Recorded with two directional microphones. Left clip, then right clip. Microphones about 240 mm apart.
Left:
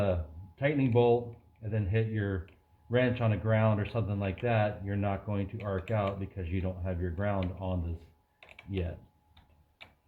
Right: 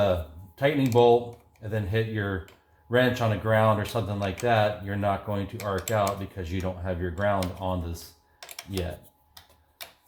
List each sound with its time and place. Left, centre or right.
0.0 s a sound: right
1.7 s speech: right
8.4 s computer keyboard: centre
9.3 s tick-tock: centre